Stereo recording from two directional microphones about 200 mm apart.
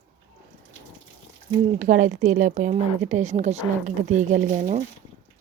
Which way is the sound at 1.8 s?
40° right (ahead or behind).